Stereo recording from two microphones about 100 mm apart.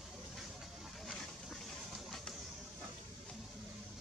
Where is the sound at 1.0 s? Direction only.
5° left (ahead or behind).